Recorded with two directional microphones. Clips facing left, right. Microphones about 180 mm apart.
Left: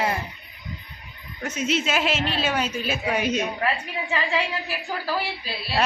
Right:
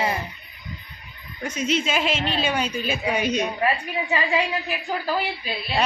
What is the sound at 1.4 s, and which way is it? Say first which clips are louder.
A woman's voice: right 1 dB; 5° left (ahead or behind).